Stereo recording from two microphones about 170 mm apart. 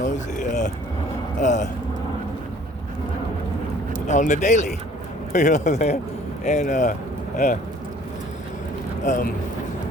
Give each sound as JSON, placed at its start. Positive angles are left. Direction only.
{"t": 0.0, "sound": "vehicle", "side_deg": 45}
{"t": 1.4, "sound": "speech", "side_deg": 45}
{"t": 4.0, "sound": "speech", "side_deg": 45}
{"t": 9.0, "sound": "speech", "side_deg": 50}